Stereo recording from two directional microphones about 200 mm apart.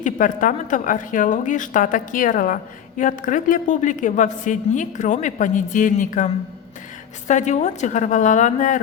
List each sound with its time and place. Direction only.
0.0 s a woman's voice: 40° left (ahead or behind)